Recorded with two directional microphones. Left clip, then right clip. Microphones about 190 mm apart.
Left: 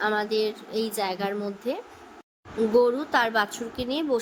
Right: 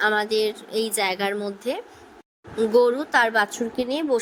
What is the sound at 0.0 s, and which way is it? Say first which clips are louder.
A woman's voice: right 4 dB; 35° right (ahead or behind).